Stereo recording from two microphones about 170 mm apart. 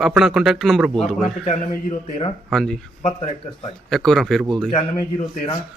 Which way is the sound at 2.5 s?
Centre (ahead or behind).